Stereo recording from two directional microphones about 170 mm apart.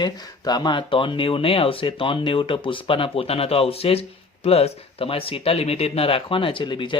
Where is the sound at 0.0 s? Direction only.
25° left (ahead or behind).